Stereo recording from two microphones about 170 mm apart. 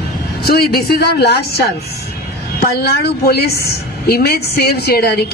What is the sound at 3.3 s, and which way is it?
A woman's voice, 65° left (ahead or behind).